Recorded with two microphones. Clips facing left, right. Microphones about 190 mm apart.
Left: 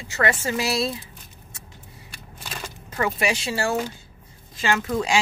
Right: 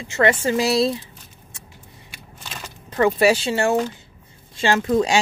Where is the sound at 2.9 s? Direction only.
35° right (ahead or behind).